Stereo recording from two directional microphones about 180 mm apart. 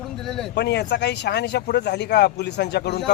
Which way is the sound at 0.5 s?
70° left (ahead or behind).